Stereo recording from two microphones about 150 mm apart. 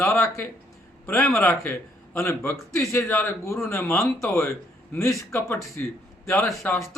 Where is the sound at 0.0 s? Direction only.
20° left (ahead or behind).